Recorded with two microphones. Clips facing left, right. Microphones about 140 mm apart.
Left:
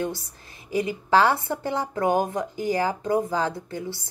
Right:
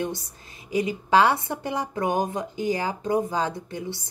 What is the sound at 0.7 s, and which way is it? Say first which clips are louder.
A woman's voice: even; 15° right (ahead or behind).